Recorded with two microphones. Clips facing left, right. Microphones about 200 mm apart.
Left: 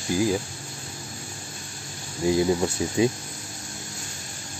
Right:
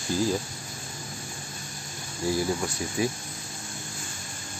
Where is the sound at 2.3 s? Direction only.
20° left (ahead or behind).